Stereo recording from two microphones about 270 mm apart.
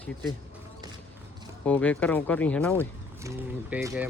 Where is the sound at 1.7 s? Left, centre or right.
Centre.